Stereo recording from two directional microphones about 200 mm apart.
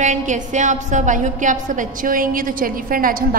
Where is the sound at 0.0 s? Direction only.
35° right (ahead or behind).